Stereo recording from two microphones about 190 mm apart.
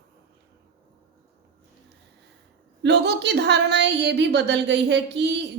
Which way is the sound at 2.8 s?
60° right (ahead or behind).